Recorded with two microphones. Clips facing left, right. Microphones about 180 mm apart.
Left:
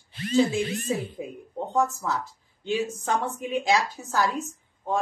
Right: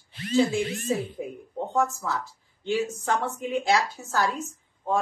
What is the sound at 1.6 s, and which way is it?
Speech, 20° left (ahead or behind).